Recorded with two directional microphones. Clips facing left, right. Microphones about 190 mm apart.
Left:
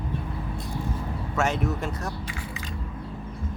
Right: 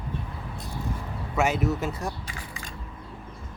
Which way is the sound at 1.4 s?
5° right (ahead or behind).